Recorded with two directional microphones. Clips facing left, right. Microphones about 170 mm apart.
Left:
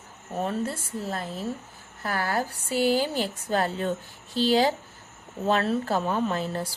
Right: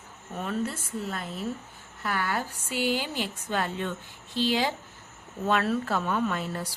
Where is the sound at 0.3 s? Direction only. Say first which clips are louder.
Left 2 dB; 35° left (ahead or behind).